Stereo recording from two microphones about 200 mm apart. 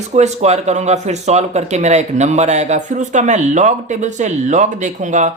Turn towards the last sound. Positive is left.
turn(degrees=-40)  # may be behind; listen again after turning